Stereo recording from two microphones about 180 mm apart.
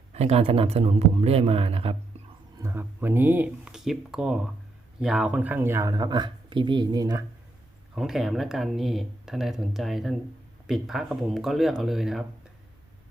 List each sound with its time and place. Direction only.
0.1 s speech: 35° right (ahead or behind)
2.6 s speech: 15° right (ahead or behind)
7.9 s speech: centre (ahead or behind)